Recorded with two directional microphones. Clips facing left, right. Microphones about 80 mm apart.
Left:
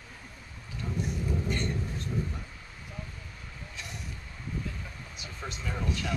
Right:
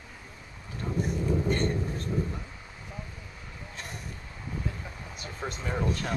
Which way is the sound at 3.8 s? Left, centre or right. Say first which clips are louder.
Right 2 dB; right.